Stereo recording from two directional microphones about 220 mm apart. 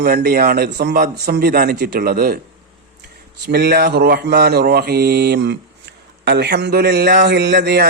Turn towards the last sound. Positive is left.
turn(degrees=-45)  # may be behind; listen again after turning